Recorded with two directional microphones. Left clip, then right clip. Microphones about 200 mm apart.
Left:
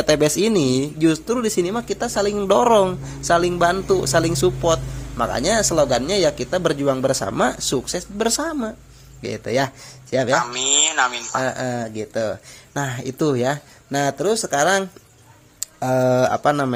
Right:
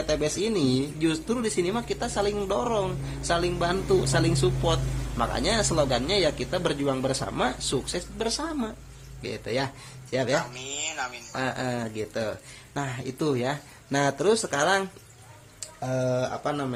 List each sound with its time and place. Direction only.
0.0 s speech: 45° left (ahead or behind)
2.5 s speech: 45° left (ahead or behind); by 10.3 s 30° left (ahead or behind)
10.5 s a sound: 50° left (ahead or behind)
11.3 s speech: 25° left (ahead or behind)
13.9 s speech: 15° left (ahead or behind)
15.6 s speech: 45° left (ahead or behind)